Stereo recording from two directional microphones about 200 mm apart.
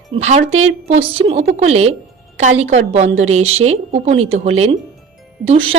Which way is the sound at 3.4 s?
90° right.